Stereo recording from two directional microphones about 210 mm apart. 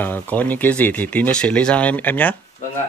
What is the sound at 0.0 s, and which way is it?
Speech, 10° left (ahead or behind).